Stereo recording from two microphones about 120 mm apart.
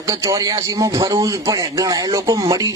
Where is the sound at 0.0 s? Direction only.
25° right (ahead or behind).